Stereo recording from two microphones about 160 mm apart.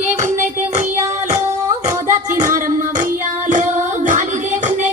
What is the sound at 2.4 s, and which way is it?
Music, 55° right (ahead or behind).